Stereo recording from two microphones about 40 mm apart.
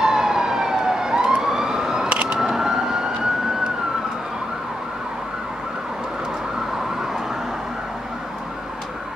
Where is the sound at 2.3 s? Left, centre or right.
Centre.